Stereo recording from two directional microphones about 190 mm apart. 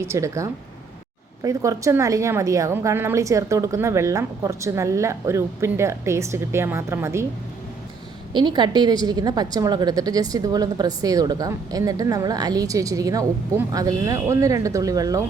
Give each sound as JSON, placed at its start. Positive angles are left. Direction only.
{"t": 0.0, "sound": "a woman's voice", "side_deg": -15}
{"t": 8.3, "sound": "a woman's voice", "side_deg": -25}